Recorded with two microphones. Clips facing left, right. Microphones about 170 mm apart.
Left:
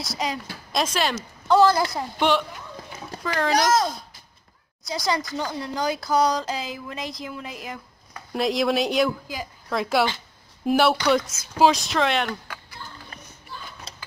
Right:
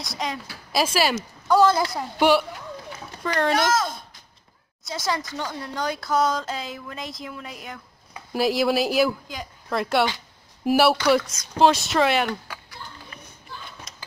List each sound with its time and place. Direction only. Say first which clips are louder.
0.0 s speech: left 2 dB; centre (ahead or behind)
3.3 s speech: right 2 dB; centre (ahead or behind)
3.5 s speech: left 2 dB; 35° left (ahead or behind)
4.8 s speech: left 2 dB; centre (ahead or behind)
13.9 s a sound: left 4 dB; 35° left (ahead or behind)